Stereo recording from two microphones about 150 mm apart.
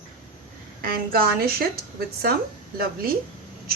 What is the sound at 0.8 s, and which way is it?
Speech, 85° right.